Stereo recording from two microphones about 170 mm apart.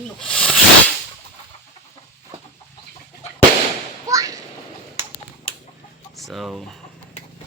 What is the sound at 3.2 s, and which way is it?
Fireworks, 40° left (ahead or behind).